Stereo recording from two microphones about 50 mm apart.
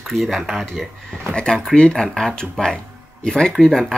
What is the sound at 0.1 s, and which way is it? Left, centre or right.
Speech, centre.